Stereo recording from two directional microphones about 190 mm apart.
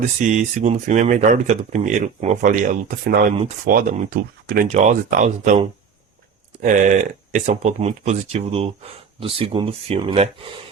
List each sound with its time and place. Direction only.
0.2 s speech: 40° right (ahead or behind)